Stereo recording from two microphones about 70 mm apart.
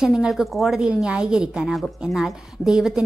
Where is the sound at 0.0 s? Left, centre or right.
Centre.